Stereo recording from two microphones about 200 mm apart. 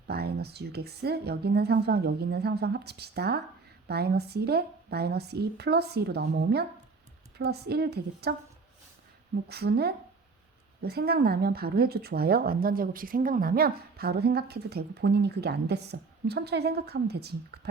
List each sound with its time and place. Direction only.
0.1 s speech: 55° right (ahead or behind)